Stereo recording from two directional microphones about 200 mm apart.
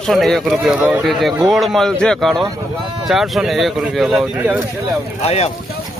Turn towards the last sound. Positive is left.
turn(degrees=30)  # may be behind; listen again after turning